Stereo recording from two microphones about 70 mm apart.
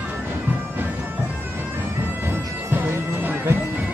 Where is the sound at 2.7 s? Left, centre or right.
Right.